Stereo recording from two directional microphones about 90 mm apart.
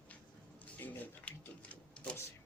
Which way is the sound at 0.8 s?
20° left (ahead or behind).